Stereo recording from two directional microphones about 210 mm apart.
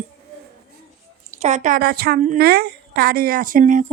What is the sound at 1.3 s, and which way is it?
A woman's voice, 35° right (ahead or behind).